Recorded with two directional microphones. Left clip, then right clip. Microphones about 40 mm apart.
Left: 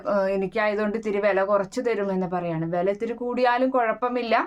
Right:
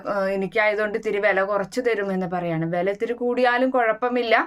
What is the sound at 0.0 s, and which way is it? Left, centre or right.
Speech, left.